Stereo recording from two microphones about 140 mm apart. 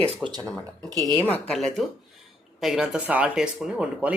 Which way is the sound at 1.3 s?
5° left (ahead or behind).